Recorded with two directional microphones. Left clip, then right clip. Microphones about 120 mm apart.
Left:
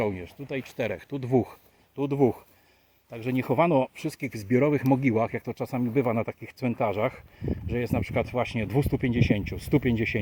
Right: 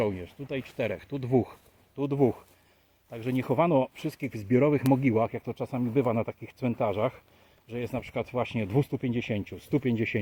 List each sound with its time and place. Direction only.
0.0 s speech: 40° left (ahead or behind)
2.0 s speech: 35° left (ahead or behind)
3.9 s speech: 20° left (ahead or behind)
7.7 s speech: 15° left (ahead or behind)
9.0 s speech: 25° left (ahead or behind)